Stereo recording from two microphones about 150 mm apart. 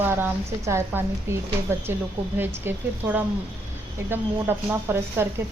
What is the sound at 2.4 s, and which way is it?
Speech, 10° right (ahead or behind).